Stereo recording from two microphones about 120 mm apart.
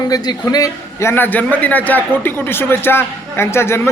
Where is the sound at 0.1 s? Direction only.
30° left (ahead or behind).